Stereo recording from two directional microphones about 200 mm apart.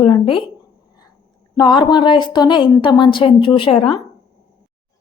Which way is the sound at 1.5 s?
20° left (ahead or behind).